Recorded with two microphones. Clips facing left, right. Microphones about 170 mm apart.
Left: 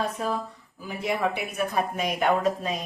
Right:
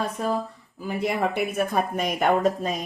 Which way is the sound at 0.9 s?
50° right (ahead or behind).